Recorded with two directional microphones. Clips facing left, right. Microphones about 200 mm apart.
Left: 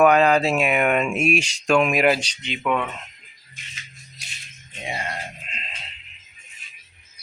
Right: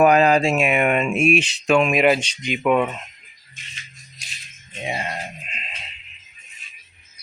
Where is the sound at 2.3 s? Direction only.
10° right (ahead or behind).